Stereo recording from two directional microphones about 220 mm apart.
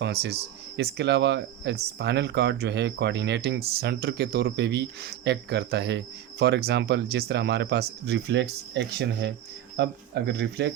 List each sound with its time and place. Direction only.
0.0 s speech: 45° right (ahead or behind)